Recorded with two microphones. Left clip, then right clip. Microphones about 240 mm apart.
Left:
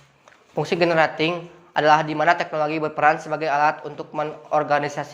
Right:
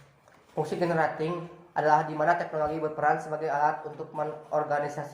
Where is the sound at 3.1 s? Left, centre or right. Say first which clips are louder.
Left 7 dB; left.